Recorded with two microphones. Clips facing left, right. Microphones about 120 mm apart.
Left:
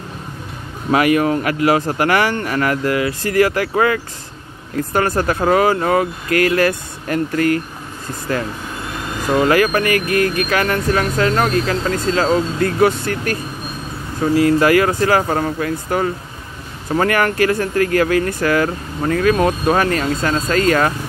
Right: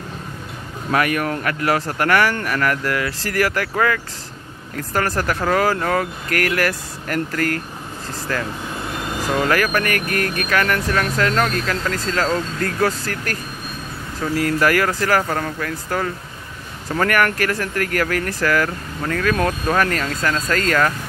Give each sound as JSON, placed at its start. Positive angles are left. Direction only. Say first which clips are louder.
{"t": 1.1, "sound": "speech", "louder": "left 6 dB", "side_deg": 15}
{"t": 3.1, "sound": "speech", "louder": "left 5 dB", "side_deg": -75}
{"t": 3.4, "sound": "speech", "louder": "left 3 dB", "side_deg": 20}
{"t": 9.8, "sound": "speech", "louder": "left 5 dB", "side_deg": -55}
{"t": 10.2, "sound": "speech", "louder": "left 3 dB", "side_deg": 25}